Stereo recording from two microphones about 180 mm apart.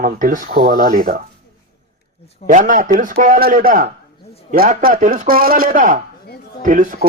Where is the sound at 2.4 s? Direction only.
45° right (ahead or behind).